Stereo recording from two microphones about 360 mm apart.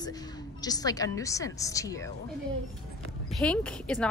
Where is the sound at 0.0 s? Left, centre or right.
Centre.